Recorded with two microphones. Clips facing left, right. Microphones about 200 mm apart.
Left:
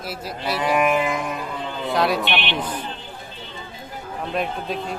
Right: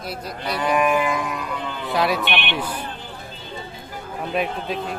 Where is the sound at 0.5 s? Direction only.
20° left (ahead or behind).